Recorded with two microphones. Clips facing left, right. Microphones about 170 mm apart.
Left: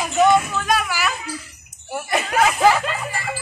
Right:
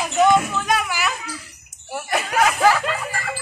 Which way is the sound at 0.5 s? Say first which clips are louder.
Left 1 dB; 15° right (ahead or behind).